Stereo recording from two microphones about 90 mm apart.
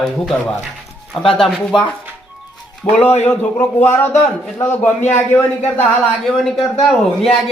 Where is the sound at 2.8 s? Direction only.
40° left (ahead or behind).